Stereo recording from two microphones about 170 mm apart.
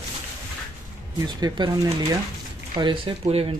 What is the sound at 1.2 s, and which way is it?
Speech, 25° right (ahead or behind).